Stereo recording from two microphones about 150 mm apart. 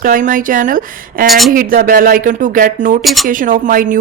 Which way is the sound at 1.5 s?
70° right (ahead or behind).